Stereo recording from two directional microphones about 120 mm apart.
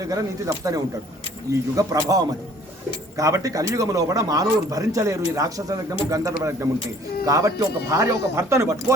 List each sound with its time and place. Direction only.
0.0 s speech: 30° right (ahead or behind)